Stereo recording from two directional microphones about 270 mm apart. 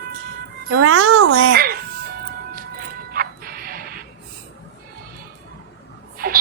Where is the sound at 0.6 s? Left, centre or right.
Right.